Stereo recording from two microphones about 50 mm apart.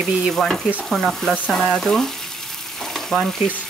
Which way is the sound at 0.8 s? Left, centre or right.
Centre.